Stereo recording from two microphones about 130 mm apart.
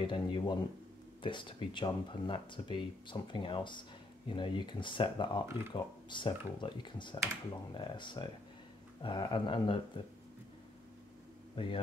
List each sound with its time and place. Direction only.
0.0 s speech: 40° left (ahead or behind)
11.5 s hum: 40° left (ahead or behind)